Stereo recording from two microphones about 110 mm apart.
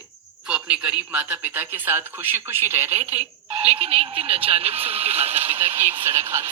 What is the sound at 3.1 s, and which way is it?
Speech, 70° right (ahead or behind).